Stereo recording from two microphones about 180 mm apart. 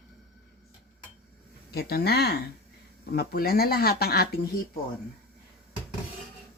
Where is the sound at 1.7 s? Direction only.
60° left (ahead or behind).